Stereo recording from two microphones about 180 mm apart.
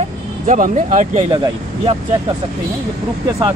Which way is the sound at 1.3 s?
25° right (ahead or behind).